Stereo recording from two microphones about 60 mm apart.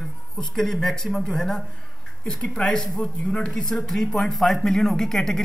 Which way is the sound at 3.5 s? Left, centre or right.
Centre.